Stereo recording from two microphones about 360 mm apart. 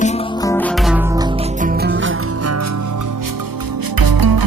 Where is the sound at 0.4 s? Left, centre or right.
Centre.